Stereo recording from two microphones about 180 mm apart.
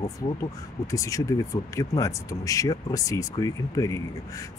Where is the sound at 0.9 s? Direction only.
20° left (ahead or behind).